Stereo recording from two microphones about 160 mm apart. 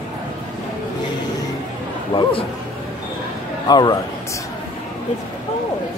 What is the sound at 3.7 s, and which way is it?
Speech, 25° left (ahead or behind).